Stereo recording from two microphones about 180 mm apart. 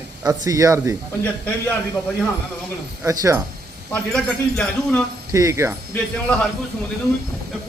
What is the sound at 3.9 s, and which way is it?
A man's voice, 5° left (ahead or behind).